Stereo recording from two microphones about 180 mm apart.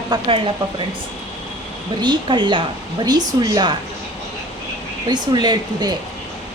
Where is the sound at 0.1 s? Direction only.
30° right (ahead or behind).